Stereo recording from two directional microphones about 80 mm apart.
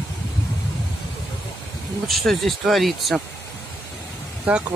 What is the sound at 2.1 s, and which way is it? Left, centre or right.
Speech, centre.